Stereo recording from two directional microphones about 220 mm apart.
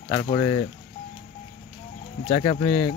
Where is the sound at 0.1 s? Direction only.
20° left (ahead or behind).